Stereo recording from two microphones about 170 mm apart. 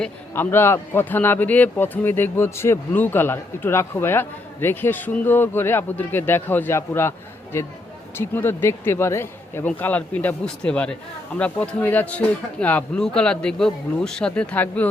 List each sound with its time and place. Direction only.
0.0 s a man's voice: 15° left (ahead or behind)